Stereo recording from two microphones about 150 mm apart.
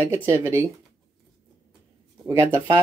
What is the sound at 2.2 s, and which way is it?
Speech, 15° right (ahead or behind).